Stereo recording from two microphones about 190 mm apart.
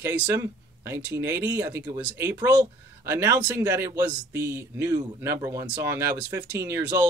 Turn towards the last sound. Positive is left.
turn(degrees=-10)  # may be behind; listen again after turning